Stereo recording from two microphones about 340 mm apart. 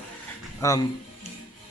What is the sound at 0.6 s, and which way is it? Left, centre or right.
Speech, centre.